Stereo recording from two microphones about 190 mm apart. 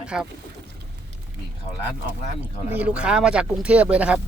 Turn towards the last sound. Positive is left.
turn(degrees=-5)  # may be behind; listen again after turning